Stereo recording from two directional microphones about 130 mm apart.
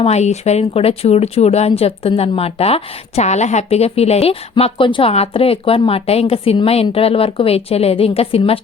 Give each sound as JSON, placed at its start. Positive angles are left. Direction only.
{"t": 0.0, "sound": "speech", "side_deg": 55}